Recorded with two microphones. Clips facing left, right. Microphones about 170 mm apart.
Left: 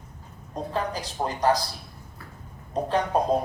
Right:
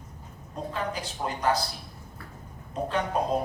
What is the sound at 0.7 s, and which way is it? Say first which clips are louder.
Speech: left 3 dB; 35° left (ahead or behind).